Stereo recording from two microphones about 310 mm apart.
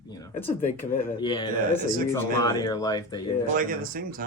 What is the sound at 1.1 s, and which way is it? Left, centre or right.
Speech, centre.